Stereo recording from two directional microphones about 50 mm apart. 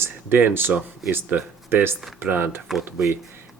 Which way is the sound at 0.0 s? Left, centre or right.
Right.